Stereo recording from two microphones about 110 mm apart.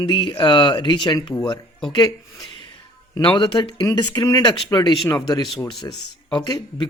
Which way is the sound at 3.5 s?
40° left (ahead or behind).